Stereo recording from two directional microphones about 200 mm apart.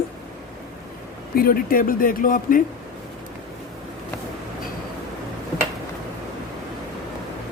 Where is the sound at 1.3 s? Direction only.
45° left (ahead or behind).